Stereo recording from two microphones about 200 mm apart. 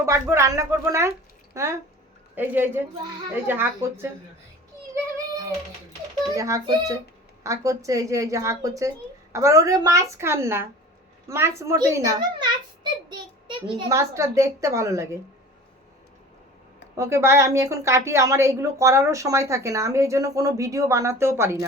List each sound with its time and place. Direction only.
0.0 s a woman's voice: 15° right (ahead or behind)
6.3 s a woman's voice: 15° right (ahead or behind)
17.0 s a woman's voice: 15° right (ahead or behind)